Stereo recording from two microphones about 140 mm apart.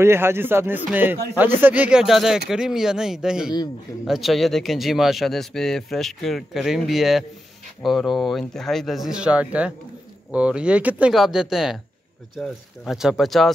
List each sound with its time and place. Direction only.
0.0 s speech: 15° right (ahead or behind); by 13.5 s centre (ahead or behind)